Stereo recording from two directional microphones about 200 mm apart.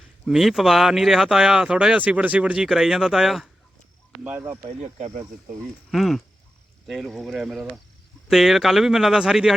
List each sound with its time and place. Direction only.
0.3 s speech: centre (ahead or behind)
4.6 s speech: 35° right (ahead or behind)
5.9 s speech: centre (ahead or behind)